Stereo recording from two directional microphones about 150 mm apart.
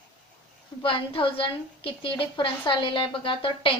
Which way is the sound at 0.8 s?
35° left (ahead or behind).